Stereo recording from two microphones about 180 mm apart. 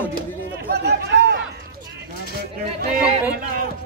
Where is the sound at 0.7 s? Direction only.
65° right (ahead or behind).